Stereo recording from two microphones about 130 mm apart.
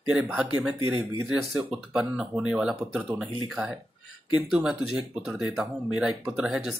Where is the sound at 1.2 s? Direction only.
5° right (ahead or behind).